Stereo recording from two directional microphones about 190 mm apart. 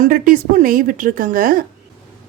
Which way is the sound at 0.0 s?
45° right (ahead or behind).